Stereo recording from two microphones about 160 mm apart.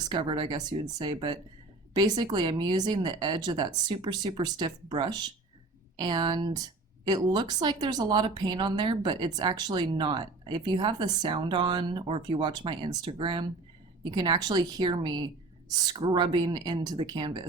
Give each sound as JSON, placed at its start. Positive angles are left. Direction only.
{"t": 0.1, "sound": "speech", "side_deg": -30}